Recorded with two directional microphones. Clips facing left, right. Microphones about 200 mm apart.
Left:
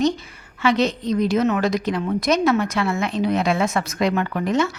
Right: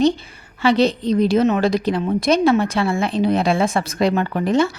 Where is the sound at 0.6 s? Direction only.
30° right (ahead or behind).